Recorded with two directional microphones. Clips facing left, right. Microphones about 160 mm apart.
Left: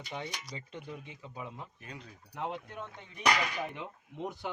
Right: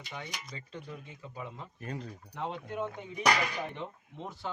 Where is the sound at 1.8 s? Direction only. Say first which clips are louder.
Right 8 dB; 40° right (ahead or behind).